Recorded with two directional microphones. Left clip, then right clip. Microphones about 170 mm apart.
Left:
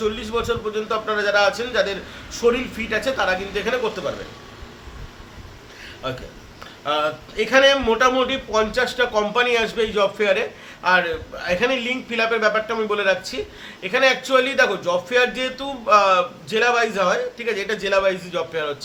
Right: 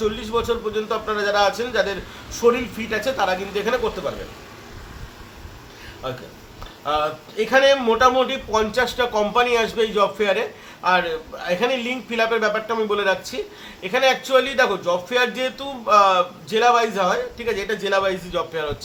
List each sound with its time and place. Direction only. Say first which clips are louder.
0.0 s a man's voice: right 1 dB; 5° left (ahead or behind)
6.0 s a man's voice: left 1 dB; 10° left (ahead or behind)